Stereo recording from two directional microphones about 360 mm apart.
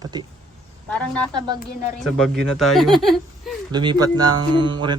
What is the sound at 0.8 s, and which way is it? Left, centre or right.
Speech, centre.